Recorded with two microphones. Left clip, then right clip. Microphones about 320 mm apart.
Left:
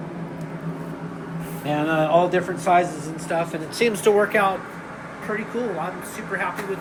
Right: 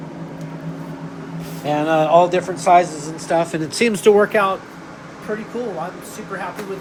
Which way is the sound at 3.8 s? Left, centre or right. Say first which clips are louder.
Right 4 dB; right.